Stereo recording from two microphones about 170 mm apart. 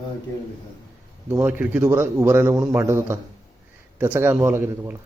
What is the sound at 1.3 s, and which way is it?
A man's voice, 10° right (ahead or behind).